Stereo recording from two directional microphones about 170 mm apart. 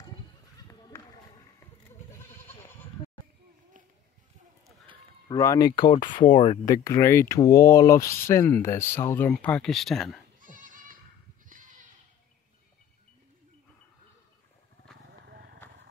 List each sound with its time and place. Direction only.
2.4 s bleat: 15° left (ahead or behind)
5.3 s speech: 20° left (ahead or behind)
6.6 s speech: 20° left (ahead or behind); by 10.2 s centre (ahead or behind)
10.4 s goat: 50° right (ahead or behind)
15.0 s vehicle: 90° right